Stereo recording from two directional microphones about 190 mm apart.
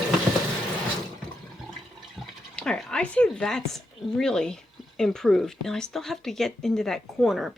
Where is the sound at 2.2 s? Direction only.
5° left (ahead or behind).